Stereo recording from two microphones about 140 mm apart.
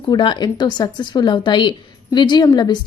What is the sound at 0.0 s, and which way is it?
A woman's voice, 30° left (ahead or behind).